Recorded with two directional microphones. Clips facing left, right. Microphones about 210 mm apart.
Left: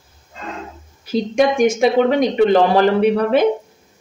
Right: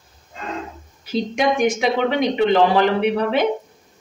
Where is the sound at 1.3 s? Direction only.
45° left (ahead or behind).